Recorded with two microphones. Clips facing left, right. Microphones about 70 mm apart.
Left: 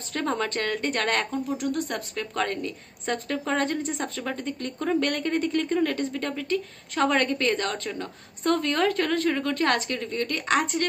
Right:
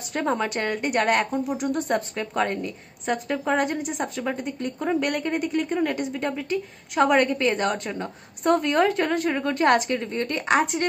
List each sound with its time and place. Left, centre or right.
0.1 s a woman's voice: centre